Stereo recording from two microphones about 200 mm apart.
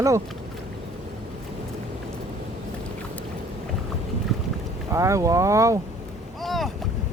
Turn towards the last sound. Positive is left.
turn(degrees=0)  # may be behind; listen again after turning